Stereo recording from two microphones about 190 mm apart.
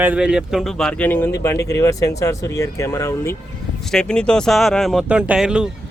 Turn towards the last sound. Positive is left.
turn(degrees=-5)  # may be behind; listen again after turning